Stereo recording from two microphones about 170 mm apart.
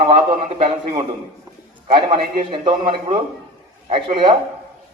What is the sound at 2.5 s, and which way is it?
A man's voice, 35° right (ahead or behind).